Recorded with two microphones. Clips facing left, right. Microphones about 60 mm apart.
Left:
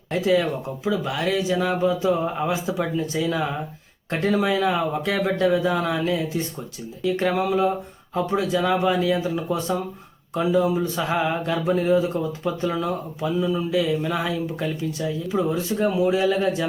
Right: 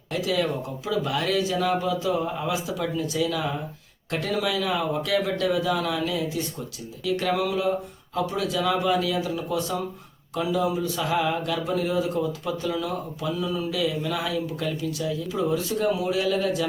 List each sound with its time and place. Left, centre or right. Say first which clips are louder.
0.1 s speech: left 5 dB; left
0.9 s speech: left 2 dB; centre